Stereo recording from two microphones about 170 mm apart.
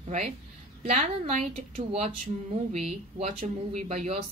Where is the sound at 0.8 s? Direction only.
40° right (ahead or behind).